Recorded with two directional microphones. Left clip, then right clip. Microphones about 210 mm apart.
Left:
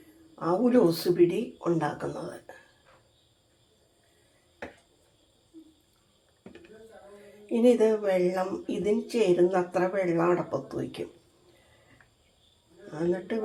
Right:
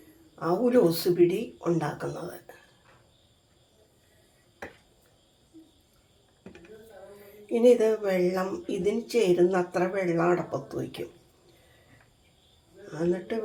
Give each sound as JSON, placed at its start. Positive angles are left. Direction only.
{"t": 0.3, "sound": "speech", "side_deg": 15}
{"t": 7.5, "sound": "speech", "side_deg": 15}
{"t": 12.9, "sound": "speech", "side_deg": 15}